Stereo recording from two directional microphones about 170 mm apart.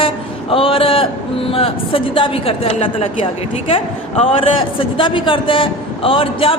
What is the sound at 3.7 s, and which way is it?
A woman's voice, 35° left (ahead or behind).